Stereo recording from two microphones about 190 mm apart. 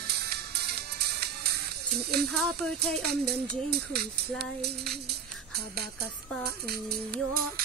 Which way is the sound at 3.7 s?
55° right (ahead or behind).